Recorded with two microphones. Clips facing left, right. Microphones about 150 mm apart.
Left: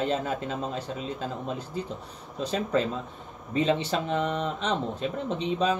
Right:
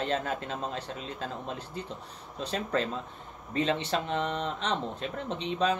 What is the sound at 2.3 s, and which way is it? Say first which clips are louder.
Speech: left 4 dB; 5° left (ahead or behind).